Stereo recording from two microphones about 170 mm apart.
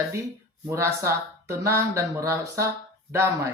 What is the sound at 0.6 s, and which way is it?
Speech, 15° right (ahead or behind).